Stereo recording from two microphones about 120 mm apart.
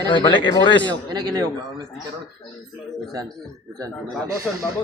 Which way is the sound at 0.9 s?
35° right (ahead or behind).